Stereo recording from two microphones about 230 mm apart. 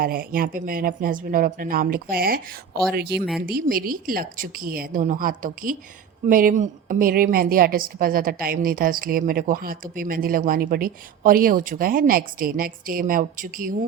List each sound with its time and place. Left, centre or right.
0.0 s a woman's voice: right